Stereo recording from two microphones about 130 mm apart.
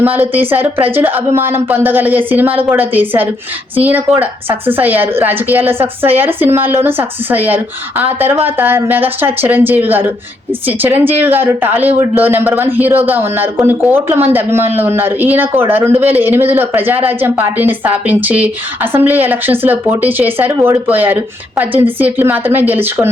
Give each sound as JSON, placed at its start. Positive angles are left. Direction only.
{"t": 0.0, "sound": "speech", "side_deg": -15}